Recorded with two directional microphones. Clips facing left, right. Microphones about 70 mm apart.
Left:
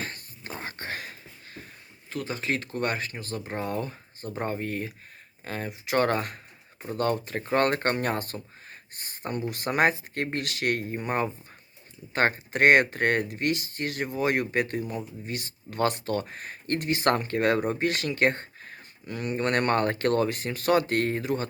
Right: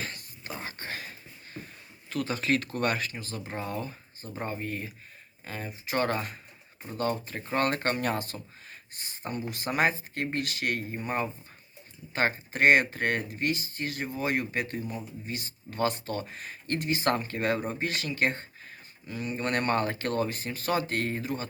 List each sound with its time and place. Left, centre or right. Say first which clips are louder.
0.0 s a sound: left 2 dB; left
2.0 s speech: right 2 dB; left
3.1 s speech: left 3 dB; left